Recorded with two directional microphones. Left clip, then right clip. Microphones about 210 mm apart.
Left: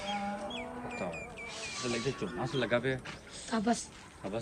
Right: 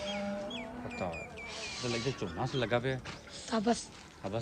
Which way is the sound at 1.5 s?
40° right (ahead or behind).